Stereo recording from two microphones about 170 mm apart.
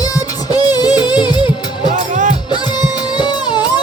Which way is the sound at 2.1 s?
45° right (ahead or behind).